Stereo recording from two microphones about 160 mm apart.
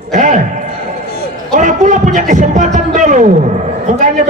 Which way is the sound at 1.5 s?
50° right (ahead or behind).